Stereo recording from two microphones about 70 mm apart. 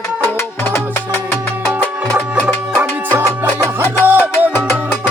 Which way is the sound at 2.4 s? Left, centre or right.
Centre.